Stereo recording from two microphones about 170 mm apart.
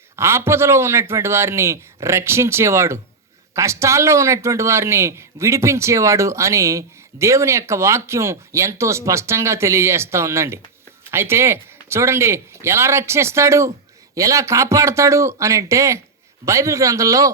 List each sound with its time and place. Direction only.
0.2 s a man's voice: 15° right (ahead or behind)